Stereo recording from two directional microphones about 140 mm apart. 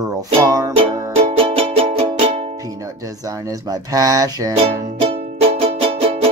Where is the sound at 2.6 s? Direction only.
25° right (ahead or behind).